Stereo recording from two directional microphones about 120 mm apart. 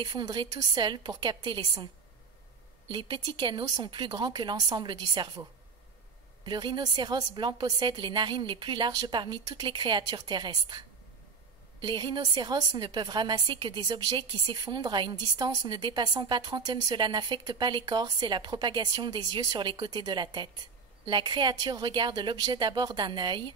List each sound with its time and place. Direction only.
0.0 s a woman's voice: 35° right (ahead or behind)
2.9 s a woman's voice: 40° right (ahead or behind)
6.4 s a woman's voice: 40° right (ahead or behind)
11.8 s a woman's voice: 40° right (ahead or behind)